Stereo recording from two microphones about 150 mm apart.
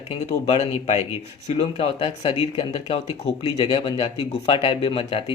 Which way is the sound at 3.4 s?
30° left (ahead or behind).